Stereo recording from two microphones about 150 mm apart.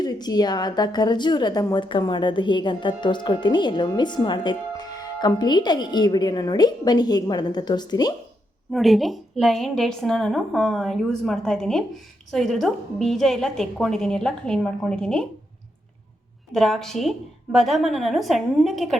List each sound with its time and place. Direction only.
0.0 s a woman's voice: 25° left (ahead or behind)
8.7 s a woman's voice: centre (ahead or behind)
16.6 s a woman's voice: centre (ahead or behind)